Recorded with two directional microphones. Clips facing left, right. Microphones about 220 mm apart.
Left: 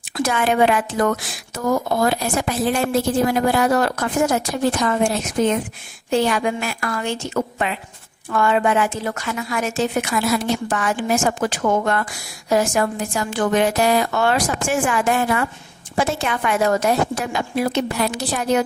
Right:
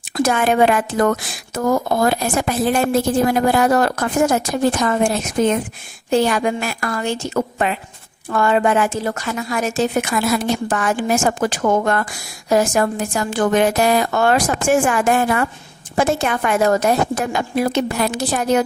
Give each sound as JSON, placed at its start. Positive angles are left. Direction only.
{"t": 0.2, "sound": "a woman's voice", "side_deg": -45}